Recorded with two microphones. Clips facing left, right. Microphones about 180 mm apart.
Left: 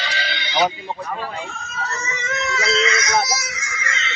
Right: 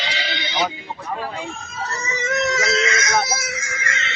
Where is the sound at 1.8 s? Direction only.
35° right (ahead or behind).